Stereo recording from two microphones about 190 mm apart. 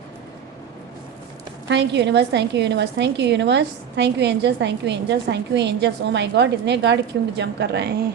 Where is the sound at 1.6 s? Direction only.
65° right (ahead or behind).